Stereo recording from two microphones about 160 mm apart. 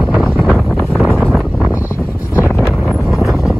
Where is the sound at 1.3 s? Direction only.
Centre (ahead or behind).